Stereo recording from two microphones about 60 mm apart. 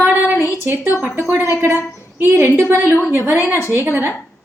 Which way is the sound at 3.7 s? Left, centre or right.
Right.